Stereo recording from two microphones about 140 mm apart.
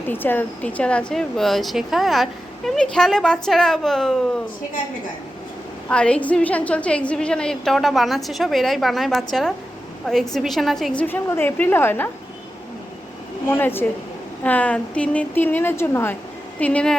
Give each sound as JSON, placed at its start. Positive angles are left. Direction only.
{"t": 0.1, "sound": "speech", "side_deg": 15}
{"t": 5.9, "sound": "speech", "side_deg": 10}
{"t": 11.0, "sound": "a woman's voice", "side_deg": 15}
{"t": 13.5, "sound": "a woman's voice", "side_deg": 15}